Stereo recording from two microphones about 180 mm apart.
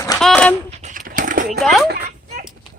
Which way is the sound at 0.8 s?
45° right (ahead or behind).